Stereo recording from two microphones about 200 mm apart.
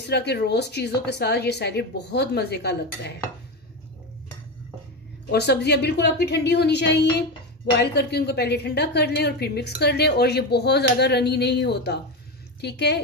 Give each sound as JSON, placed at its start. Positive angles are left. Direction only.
{"t": 0.1, "sound": "a woman's voice", "side_deg": 55}
{"t": 5.3, "sound": "a woman's voice", "side_deg": 55}